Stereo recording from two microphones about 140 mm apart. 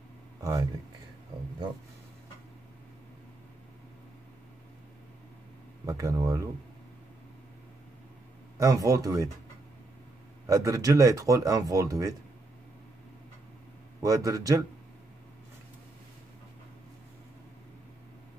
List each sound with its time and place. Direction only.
0.4 s speech: 25° right (ahead or behind)
5.9 s speech: 25° right (ahead or behind)
8.5 s speech: 25° right (ahead or behind)
10.4 s speech: 25° right (ahead or behind)
14.0 s speech: 25° right (ahead or behind)